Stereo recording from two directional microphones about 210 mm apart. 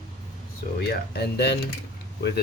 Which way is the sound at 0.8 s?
50° left (ahead or behind).